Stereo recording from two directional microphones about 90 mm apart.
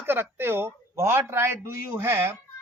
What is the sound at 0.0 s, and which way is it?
Speech, 25° right (ahead or behind).